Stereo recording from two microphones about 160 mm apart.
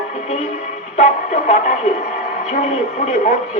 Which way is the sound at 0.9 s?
45° left (ahead or behind).